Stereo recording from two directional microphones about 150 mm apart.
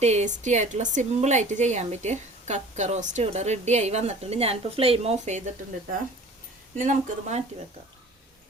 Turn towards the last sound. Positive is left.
turn(degrees=-50)  # may be behind; listen again after turning